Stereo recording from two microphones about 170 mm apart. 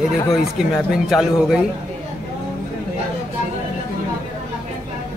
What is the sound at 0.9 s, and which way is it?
Speech, 5° right (ahead or behind).